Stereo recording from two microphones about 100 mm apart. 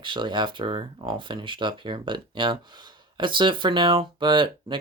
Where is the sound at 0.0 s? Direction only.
55° right (ahead or behind).